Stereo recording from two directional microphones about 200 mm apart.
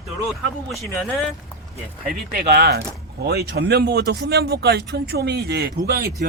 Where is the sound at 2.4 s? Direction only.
50° right (ahead or behind).